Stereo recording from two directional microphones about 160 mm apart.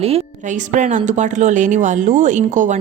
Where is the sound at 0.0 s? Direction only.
45° right (ahead or behind).